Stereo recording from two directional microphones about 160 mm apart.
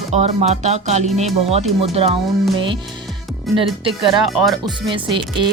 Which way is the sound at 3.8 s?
35° right (ahead or behind).